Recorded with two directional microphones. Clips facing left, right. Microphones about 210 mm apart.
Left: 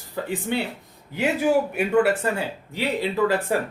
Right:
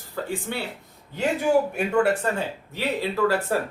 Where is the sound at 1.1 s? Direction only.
10° left (ahead or behind).